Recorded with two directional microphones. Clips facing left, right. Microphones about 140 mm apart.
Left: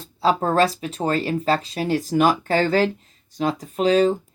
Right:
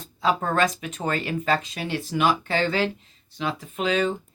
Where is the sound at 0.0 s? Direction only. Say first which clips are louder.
Left 4 dB; 35° left (ahead or behind).